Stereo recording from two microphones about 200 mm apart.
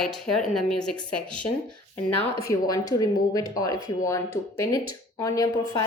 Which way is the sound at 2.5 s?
20° left (ahead or behind).